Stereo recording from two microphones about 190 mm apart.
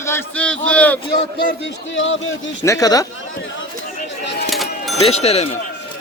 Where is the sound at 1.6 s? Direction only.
90° left.